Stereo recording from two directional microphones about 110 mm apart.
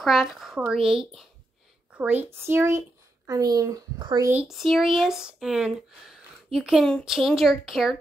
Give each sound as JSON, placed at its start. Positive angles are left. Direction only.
{"t": 0.0, "sound": "speech", "side_deg": -5}
{"t": 2.0, "sound": "speech", "side_deg": -15}
{"t": 3.3, "sound": "a child's voice", "side_deg": -35}
{"t": 4.5, "sound": "speech", "side_deg": 0}